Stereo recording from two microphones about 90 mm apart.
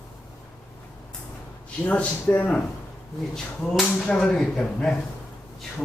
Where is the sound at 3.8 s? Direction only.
10° left (ahead or behind).